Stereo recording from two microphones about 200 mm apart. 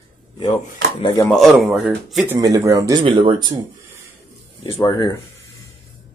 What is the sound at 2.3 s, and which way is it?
Speech, 15° right (ahead or behind).